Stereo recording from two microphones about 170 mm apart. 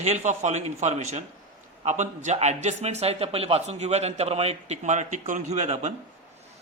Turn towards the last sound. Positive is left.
turn(degrees=-40)  # may be behind; listen again after turning